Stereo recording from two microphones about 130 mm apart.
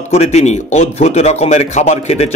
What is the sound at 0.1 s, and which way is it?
Speech, 55° left (ahead or behind).